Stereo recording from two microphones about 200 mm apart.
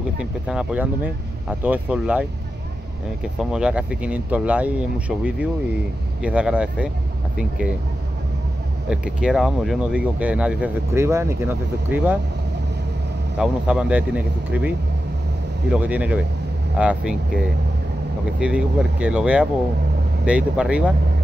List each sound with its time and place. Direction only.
0.2 s speech: 5° right (ahead or behind)
3.3 s speech: 5° right (ahead or behind)
8.8 s speech: 5° right (ahead or behind)
13.4 s speech: 5° right (ahead or behind)
15.7 s speech: 5° right (ahead or behind)
18.4 s speech: 5° right (ahead or behind)